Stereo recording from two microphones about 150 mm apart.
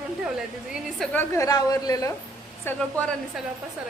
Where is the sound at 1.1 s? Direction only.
20° left (ahead or behind).